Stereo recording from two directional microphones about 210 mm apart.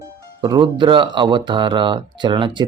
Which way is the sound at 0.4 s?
20° right (ahead or behind).